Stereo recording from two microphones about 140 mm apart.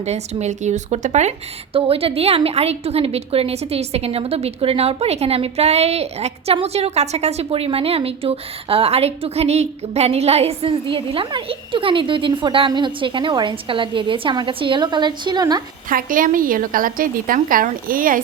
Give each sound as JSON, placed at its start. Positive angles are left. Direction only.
{"t": 0.0, "sound": "speech", "side_deg": -50}
{"t": 1.7, "sound": "a woman's voice", "side_deg": -40}
{"t": 15.9, "sound": "a woman's voice", "side_deg": -75}